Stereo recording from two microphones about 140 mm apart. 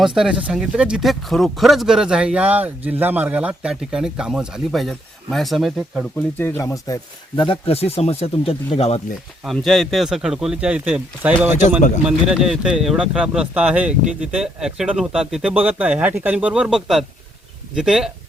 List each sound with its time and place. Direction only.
0.0 s speech: 5° right (ahead or behind)
6.4 s speech: 20° left (ahead or behind)
7.3 s speech: 40° left (ahead or behind)
9.4 s speech: centre (ahead or behind)